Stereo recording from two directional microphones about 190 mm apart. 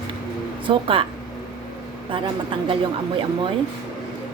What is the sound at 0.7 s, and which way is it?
Speech, 30° right (ahead or behind).